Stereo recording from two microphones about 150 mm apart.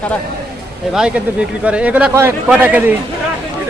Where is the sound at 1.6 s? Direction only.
10° right (ahead or behind).